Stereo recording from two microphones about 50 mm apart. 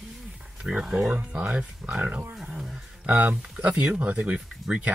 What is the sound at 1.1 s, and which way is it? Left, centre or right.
Speech, right.